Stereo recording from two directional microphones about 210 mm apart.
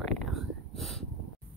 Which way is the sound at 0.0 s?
Centre (ahead or behind).